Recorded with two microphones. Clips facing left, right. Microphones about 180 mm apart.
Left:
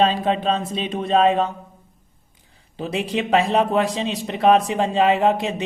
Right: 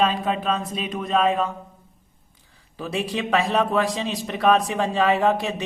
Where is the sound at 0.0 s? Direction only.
25° left (ahead or behind).